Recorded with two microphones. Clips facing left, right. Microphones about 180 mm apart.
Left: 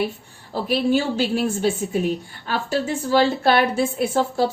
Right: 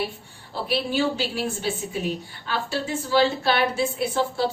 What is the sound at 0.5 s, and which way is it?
A woman's voice, 45° left (ahead or behind).